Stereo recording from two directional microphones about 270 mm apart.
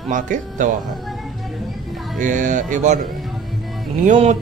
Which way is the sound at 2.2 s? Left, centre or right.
Right.